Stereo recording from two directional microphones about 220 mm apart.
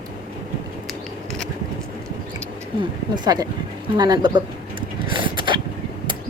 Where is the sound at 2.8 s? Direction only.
20° right (ahead or behind).